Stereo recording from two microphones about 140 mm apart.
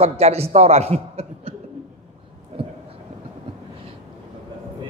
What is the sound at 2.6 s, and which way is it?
Vehicle, 40° right (ahead or behind).